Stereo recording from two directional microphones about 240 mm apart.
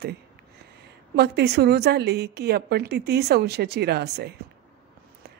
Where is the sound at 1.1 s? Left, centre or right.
Right.